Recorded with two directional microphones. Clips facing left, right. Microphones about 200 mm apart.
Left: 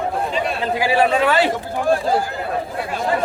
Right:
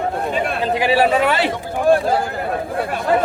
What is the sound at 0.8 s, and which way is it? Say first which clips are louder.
Speech: right 1 dB; 20° right (ahead or behind).